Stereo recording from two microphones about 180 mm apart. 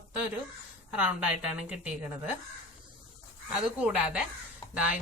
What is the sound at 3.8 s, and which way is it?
Speech, 5° right (ahead or behind).